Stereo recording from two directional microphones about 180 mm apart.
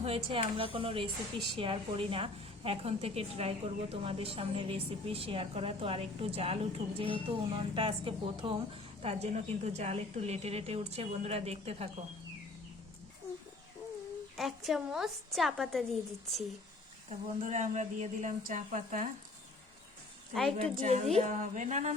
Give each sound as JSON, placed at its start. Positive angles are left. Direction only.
{"t": 0.0, "sound": "a woman's voice", "side_deg": -30}
{"t": 14.3, "sound": "a woman's voice", "side_deg": 0}
{"t": 17.1, "sound": "speech", "side_deg": -40}
{"t": 20.7, "sound": "a woman's voice", "side_deg": -35}